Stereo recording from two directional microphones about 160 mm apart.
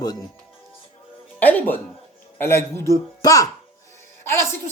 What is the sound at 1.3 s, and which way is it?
Speech, 10° left (ahead or behind).